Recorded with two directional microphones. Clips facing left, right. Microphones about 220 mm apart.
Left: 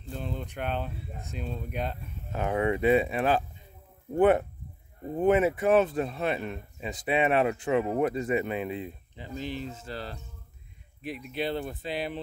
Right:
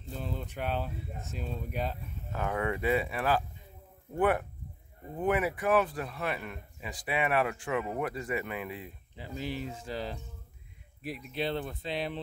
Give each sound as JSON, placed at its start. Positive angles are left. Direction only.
{"t": 0.1, "sound": "speech", "side_deg": 0}
{"t": 2.3, "sound": "speech", "side_deg": 20}
{"t": 9.1, "sound": "speech", "side_deg": -10}
{"t": 11.0, "sound": "speech", "side_deg": 0}